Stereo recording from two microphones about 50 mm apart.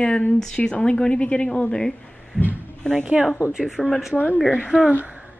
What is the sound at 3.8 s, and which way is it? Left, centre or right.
Speech, centre.